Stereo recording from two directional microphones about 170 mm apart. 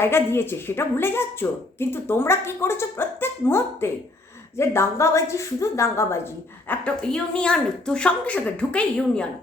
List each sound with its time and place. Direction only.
0.0 s a woman's voice: 15° left (ahead or behind)